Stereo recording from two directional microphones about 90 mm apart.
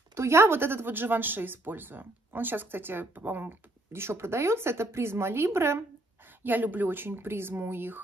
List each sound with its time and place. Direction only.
0.1 s speech: 30° right (ahead or behind)